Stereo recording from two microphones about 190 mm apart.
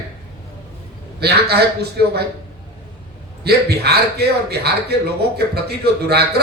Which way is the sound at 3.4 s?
55° right (ahead or behind).